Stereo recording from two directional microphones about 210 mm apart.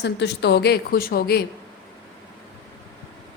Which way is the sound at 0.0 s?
55° left (ahead or behind).